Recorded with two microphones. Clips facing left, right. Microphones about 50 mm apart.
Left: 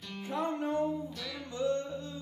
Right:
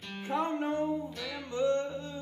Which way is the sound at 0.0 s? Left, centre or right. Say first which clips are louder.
Right 2 dB; right.